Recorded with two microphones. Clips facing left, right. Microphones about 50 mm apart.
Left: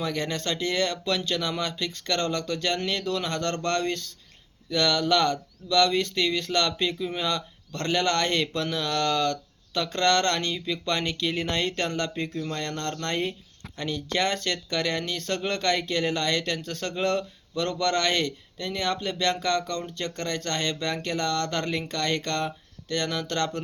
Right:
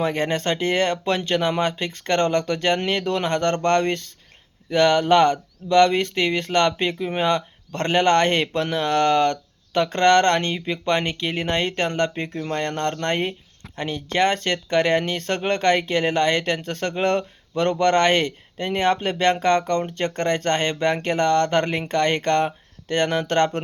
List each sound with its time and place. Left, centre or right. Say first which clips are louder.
0.0 s speech: right 7 dB; right